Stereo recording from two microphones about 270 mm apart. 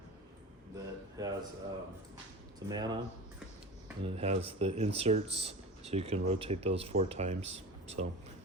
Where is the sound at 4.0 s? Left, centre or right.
Right.